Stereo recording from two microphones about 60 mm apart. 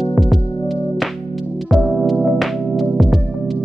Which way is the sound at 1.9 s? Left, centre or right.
Centre.